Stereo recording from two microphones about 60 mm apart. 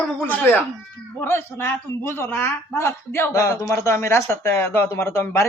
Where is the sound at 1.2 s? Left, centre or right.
Left.